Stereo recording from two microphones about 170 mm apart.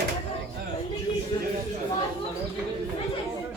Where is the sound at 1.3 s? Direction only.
25° left (ahead or behind).